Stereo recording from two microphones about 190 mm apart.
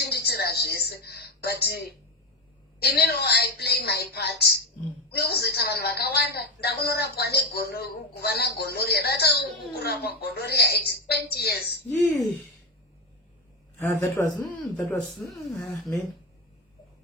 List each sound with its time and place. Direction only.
0.0 s a sound: 60° left (ahead or behind)
2.8 s a woman's voice: 55° left (ahead or behind)
13.7 s a man's voice: 10° left (ahead or behind)
14.4 s speech: centre (ahead or behind)